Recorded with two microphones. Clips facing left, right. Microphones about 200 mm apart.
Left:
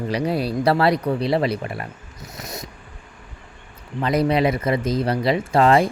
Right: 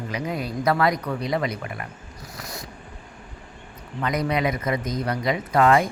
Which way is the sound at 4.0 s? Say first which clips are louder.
Left 5 dB; 30° left (ahead or behind).